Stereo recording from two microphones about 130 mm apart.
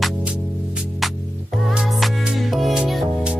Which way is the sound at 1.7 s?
5° right (ahead or behind).